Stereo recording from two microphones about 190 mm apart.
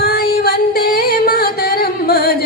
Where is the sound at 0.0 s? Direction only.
55° left (ahead or behind).